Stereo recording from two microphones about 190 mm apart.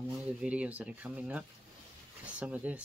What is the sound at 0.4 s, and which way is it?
Speech, 5° right (ahead or behind).